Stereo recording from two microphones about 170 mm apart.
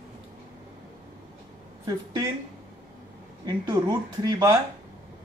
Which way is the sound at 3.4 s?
25° right (ahead or behind).